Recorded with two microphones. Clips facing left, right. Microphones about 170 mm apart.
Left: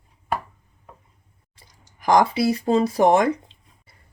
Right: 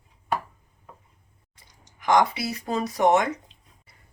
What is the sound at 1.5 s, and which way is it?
Speech, 35° left (ahead or behind).